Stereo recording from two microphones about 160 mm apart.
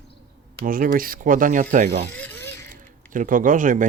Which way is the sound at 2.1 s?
15° left (ahead or behind).